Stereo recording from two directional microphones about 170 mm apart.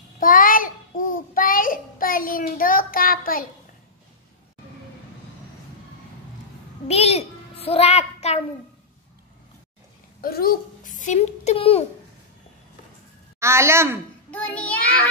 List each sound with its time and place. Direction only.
0.2 s child singing: 55° left (ahead or behind)
6.9 s a child's voice: 40° left (ahead or behind)
10.2 s a child's voice: 60° left (ahead or behind); by 11.8 s 35° left (ahead or behind)
13.4 s a woman's voice: 15° right (ahead or behind)
14.3 s child singing: 10° left (ahead or behind)